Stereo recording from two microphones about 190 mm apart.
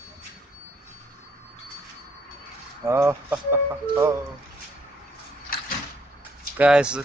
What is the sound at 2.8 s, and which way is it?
Speech, 15° right (ahead or behind).